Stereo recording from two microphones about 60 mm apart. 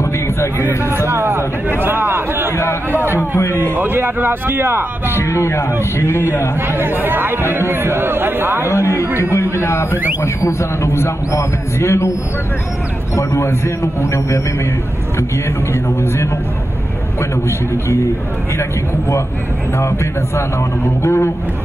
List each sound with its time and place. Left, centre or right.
0.8 s speech: right
3.1 s a man's voice: left
3.7 s speech: right
5.1 s a man's voice: left
6.7 s speech: right
8.6 s a man's voice: left
13.1 s a man's voice: left
15.7 s a man's voice: left
18.6 s speech: left
21.0 s a man's voice: left